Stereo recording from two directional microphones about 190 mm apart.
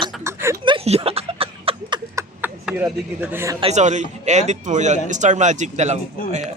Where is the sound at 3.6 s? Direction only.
35° right (ahead or behind).